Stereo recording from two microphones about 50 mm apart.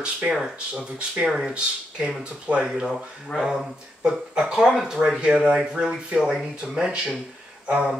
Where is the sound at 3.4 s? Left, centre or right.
Centre.